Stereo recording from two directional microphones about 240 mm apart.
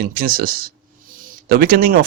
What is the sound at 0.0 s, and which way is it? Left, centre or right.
Speech, right.